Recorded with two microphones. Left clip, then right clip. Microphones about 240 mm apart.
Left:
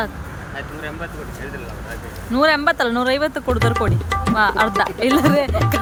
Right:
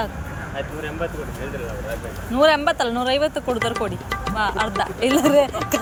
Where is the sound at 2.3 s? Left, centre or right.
Centre.